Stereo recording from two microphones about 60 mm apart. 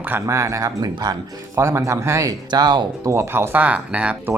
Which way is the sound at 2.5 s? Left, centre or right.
Right.